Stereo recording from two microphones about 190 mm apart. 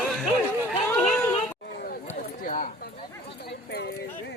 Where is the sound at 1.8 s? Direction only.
45° left (ahead or behind).